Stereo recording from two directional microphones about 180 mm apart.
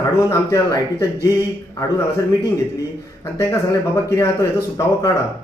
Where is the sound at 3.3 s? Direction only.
15° left (ahead or behind).